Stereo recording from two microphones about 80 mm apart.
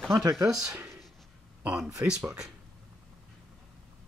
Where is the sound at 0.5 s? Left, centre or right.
Centre.